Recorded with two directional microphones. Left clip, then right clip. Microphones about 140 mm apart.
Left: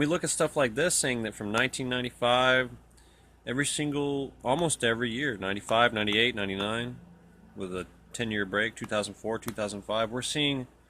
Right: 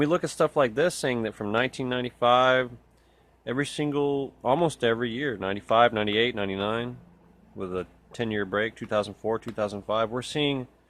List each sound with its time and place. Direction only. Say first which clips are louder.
0.0 s speech: right 4 dB; 30° right (ahead or behind)